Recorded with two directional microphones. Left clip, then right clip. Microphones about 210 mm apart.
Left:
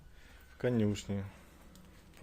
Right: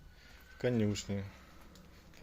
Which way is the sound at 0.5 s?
Centre (ahead or behind).